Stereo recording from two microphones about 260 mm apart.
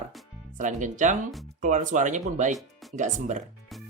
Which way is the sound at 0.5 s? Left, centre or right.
Right.